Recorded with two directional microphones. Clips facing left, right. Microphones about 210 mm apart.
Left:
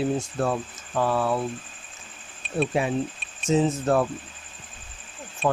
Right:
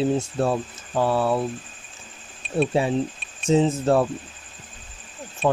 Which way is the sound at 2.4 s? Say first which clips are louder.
Right 4 dB; centre (ahead or behind).